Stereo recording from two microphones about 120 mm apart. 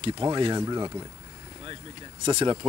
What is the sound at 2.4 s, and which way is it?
Speech, 35° right (ahead or behind).